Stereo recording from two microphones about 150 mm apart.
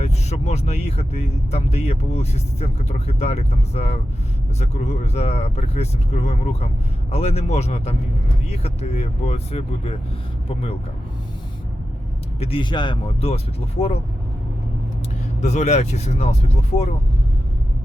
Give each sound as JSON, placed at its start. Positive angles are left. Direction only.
{"t": 0.0, "sound": "speech", "side_deg": 45}
{"t": 12.4, "sound": "speech", "side_deg": 35}
{"t": 15.4, "sound": "speech", "side_deg": 50}